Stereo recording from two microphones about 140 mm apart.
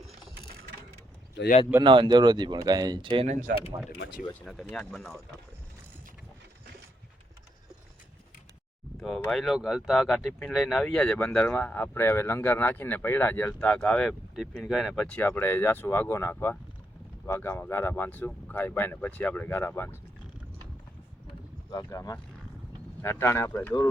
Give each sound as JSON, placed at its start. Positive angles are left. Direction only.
{"t": 1.8, "sound": "speech", "side_deg": -35}
{"t": 3.5, "sound": "speech", "side_deg": -90}
{"t": 4.4, "sound": "speech", "side_deg": 5}
{"t": 9.0, "sound": "speech", "side_deg": 5}
{"t": 21.7, "sound": "speech", "side_deg": 25}